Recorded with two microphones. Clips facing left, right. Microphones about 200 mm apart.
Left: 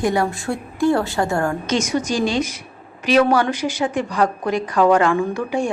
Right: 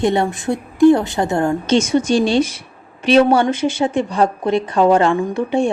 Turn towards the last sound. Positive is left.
turn(degrees=-25)  # may be behind; listen again after turning